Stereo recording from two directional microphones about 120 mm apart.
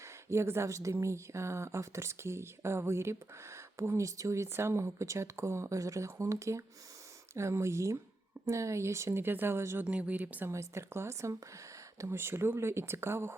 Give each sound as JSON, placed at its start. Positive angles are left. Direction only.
{"t": 0.3, "sound": "speech", "side_deg": -20}
{"t": 10.5, "sound": "speech", "side_deg": -25}